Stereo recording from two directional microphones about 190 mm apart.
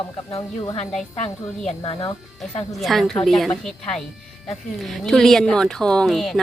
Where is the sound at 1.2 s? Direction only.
30° left (ahead or behind).